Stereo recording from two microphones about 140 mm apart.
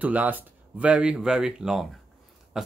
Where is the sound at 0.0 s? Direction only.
10° right (ahead or behind).